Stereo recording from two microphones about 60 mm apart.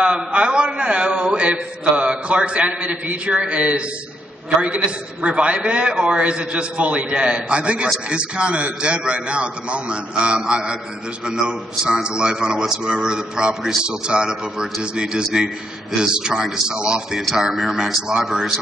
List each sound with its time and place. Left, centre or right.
0.0 s a man's voice: centre